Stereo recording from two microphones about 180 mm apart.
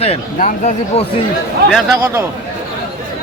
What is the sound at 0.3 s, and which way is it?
Speech, 45° left (ahead or behind).